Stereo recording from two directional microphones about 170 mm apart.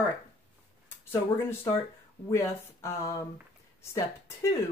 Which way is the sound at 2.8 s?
15° left (ahead or behind).